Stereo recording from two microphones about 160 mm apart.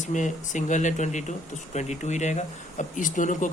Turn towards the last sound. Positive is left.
turn(degrees=55)  # may be behind; listen again after turning